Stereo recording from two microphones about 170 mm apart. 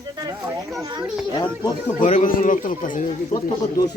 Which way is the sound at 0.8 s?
20° right (ahead or behind).